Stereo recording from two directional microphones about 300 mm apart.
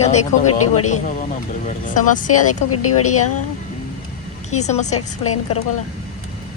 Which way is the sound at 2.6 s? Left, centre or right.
Left.